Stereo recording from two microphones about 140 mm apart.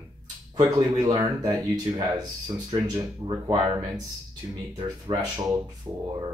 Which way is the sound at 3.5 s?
30° right (ahead or behind).